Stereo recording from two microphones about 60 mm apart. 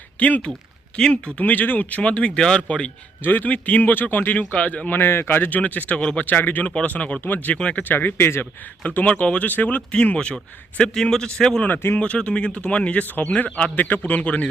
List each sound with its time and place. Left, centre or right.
0.2 s a man's voice: left
2.0 s a man's voice: centre
3.2 s a man's voice: left; by 6.2 s centre
6.2 s a man's voice: left
10.2 s a man's voice: centre
11.7 s speech: left
11.9 s a man's voice: left